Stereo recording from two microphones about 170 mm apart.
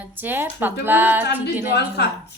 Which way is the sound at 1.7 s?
70° left (ahead or behind).